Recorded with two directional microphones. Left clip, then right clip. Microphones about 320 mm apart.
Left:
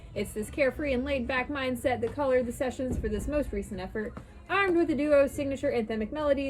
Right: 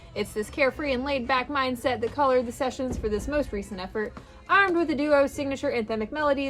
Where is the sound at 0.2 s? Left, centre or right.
Centre.